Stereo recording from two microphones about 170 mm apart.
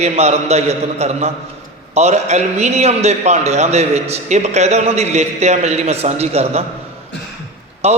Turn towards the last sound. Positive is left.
turn(degrees=-40)  # may be behind; listen again after turning